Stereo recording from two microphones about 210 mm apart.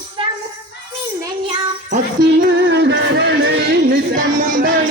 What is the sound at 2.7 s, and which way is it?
Music, 55° right (ahead or behind).